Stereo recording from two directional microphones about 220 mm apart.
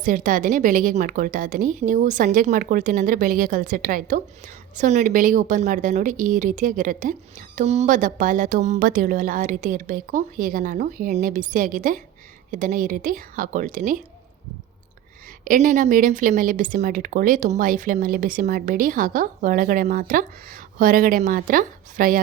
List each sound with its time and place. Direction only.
0.0 s a woman's voice: 35° right (ahead or behind)
15.4 s a woman's voice: 35° right (ahead or behind)